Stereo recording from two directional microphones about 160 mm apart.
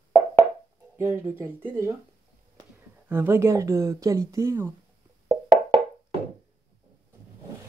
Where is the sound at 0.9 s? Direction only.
15° right (ahead or behind).